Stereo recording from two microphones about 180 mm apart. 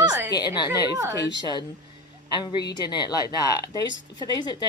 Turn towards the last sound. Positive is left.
turn(degrees=25)  # may be behind; listen again after turning